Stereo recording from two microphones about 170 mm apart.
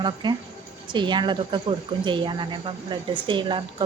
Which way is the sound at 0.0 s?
25° right (ahead or behind).